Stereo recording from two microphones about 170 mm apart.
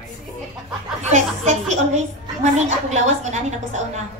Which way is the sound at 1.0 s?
45° right (ahead or behind).